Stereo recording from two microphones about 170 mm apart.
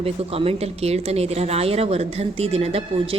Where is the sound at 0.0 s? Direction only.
35° right (ahead or behind).